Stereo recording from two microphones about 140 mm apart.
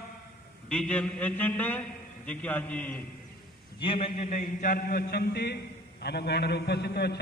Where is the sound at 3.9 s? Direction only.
55° left (ahead or behind); by 5.2 s 90° left.